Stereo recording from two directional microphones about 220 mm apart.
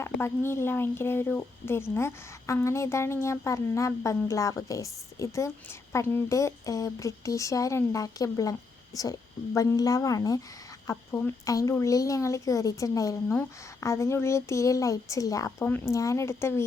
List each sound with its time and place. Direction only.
0.0 s speech: 10° left (ahead or behind)